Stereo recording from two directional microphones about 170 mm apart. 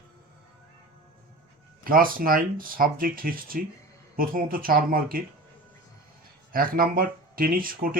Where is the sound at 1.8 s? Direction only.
55° right (ahead or behind).